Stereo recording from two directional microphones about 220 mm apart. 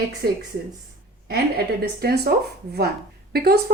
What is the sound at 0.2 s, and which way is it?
A woman's voice, 45° right (ahead or behind).